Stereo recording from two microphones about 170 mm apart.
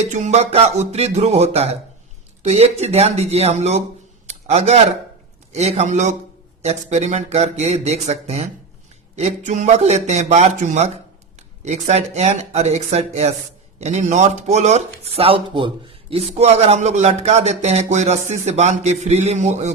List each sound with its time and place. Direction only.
0.1 s speech: 45° right (ahead or behind)